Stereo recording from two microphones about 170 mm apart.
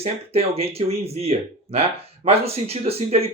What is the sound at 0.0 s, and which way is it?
Speech, 35° right (ahead or behind).